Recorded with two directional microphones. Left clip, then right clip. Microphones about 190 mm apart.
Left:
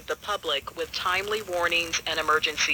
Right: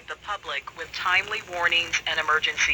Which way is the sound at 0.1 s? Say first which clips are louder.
Left 3 dB; 30° left (ahead or behind).